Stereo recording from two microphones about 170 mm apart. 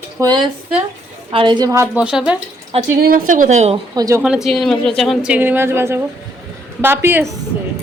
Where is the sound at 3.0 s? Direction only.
55° right (ahead or behind).